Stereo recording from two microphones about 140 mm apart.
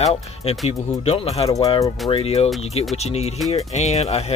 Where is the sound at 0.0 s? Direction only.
45° left (ahead or behind).